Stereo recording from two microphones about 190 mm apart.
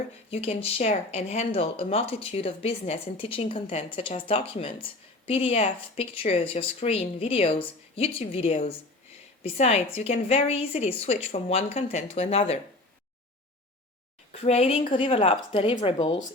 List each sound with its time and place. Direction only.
0.3 s speech: 30° left (ahead or behind)
14.3 s a woman's voice: 35° left (ahead or behind)